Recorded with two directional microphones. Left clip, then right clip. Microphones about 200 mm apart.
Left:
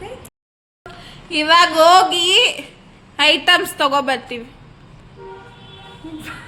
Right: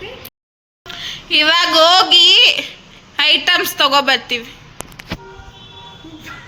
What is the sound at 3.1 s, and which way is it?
A woman's voice, 10° left (ahead or behind).